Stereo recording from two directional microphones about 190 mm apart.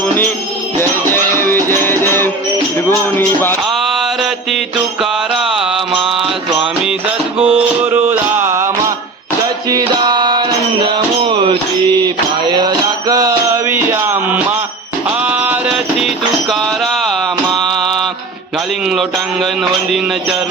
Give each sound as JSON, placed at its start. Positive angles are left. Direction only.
{"t": 0.8, "sound": "music", "side_deg": 10}
{"t": 3.7, "sound": "mantra", "side_deg": 0}
{"t": 7.3, "sound": "music", "side_deg": -10}
{"t": 9.6, "sound": "a sound", "side_deg": -25}
{"t": 10.8, "sound": "music", "side_deg": -25}
{"t": 17.6, "sound": "mantra", "side_deg": 0}
{"t": 18.9, "sound": "music", "side_deg": 0}